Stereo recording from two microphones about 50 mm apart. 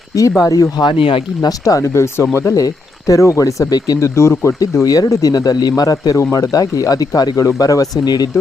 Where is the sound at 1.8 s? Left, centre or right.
Left.